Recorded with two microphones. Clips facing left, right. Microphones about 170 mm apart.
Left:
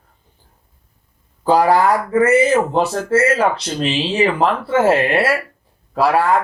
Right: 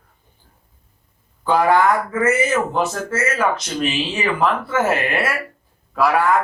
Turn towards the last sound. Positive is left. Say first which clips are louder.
# left 2 dB
turn(degrees=30)  # may be behind; listen again after turning